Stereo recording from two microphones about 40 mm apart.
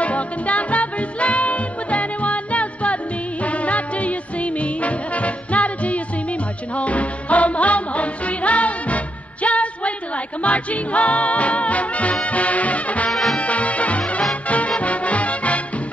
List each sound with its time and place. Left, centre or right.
0.0 s music: left
13.1 s music: centre
13.4 s music: left